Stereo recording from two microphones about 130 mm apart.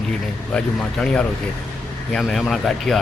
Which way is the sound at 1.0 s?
10° left (ahead or behind).